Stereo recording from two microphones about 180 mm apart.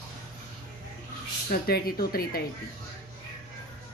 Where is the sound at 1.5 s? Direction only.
55° left (ahead or behind).